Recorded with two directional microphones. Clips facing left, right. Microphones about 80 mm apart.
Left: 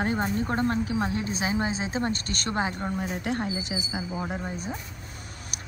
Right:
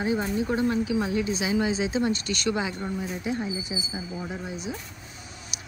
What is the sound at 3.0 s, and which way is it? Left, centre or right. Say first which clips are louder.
Speech: even; left.